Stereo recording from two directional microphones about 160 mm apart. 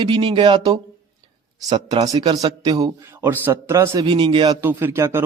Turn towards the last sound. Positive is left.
turn(degrees=-15)  # may be behind; listen again after turning